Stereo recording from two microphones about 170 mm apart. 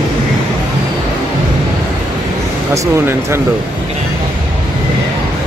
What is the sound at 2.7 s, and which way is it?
Speech, 15° right (ahead or behind).